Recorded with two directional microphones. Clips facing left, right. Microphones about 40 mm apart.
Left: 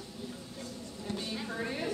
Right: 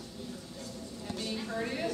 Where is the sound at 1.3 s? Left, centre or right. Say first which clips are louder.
Right 4 dB; centre.